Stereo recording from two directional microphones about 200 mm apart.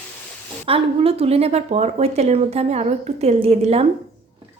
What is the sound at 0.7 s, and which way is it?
A woman's voice, 30° right (ahead or behind).